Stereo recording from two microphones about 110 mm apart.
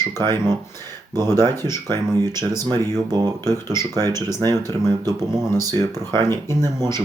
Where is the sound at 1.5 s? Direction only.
25° left (ahead or behind).